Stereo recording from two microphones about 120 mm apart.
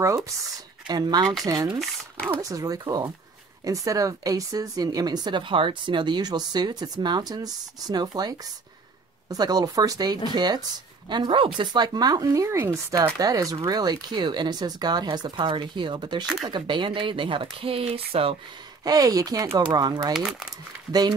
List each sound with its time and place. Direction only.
0.0 s speech: 25° right (ahead or behind)
0.8 s speech: 35° right (ahead or behind)
1.8 s speech: 5° left (ahead or behind)
2.4 s speech: 30° right (ahead or behind)
13.2 s speech: 30° right (ahead or behind); by 18.3 s 50° right (ahead or behind)
18.9 s speech: 30° right (ahead or behind)
20.1 s speech: 5° right (ahead or behind)